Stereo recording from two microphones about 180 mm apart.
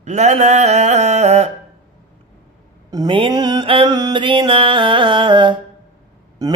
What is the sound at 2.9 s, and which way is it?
Mantra, 25° right (ahead or behind).